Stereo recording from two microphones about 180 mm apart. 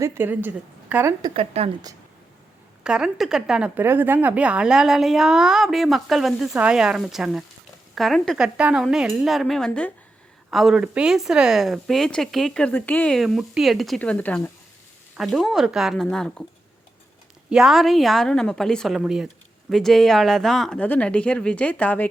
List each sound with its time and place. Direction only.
0.0 s a woman's voice: 15° right (ahead or behind)
1.2 s speech: 30° right (ahead or behind)
2.8 s a woman's voice: 5° right (ahead or behind)
17.5 s a woman's voice: 5° right (ahead or behind)